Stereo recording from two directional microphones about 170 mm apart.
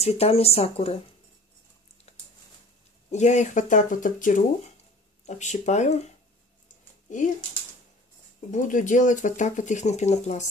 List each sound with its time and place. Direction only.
0.0 s speech: 35° left (ahead or behind)
2.1 s a sound: 40° left (ahead or behind)
3.1 s speech: 45° left (ahead or behind)
8.5 s speech: 50° left (ahead or behind)